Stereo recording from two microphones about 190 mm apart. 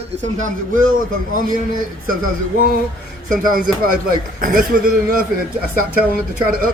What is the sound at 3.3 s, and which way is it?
A man's voice, 50° right (ahead or behind).